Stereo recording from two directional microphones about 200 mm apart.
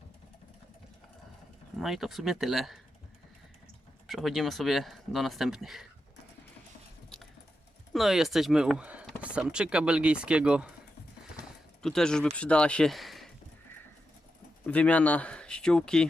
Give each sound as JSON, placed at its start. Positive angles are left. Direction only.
{"t": 1.8, "sound": "speech", "side_deg": 0}
{"t": 4.0, "sound": "speech", "side_deg": 0}
{"t": 7.9, "sound": "speech", "side_deg": 0}
{"t": 11.3, "sound": "a sound", "side_deg": 0}
{"t": 12.4, "sound": "speech", "side_deg": 5}
{"t": 14.7, "sound": "speech", "side_deg": 5}